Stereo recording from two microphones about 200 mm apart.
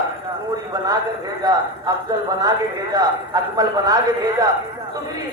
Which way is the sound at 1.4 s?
20° right (ahead or behind).